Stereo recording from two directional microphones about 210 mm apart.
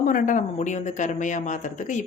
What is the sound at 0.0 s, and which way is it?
Speech, 40° left (ahead or behind).